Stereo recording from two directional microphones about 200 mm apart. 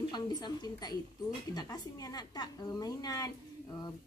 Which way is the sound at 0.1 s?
20° left (ahead or behind).